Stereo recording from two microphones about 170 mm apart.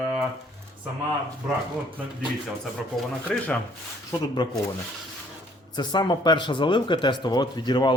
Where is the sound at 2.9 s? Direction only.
Centre (ahead or behind).